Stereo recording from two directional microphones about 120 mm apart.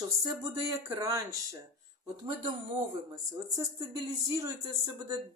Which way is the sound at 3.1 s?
30° right (ahead or behind).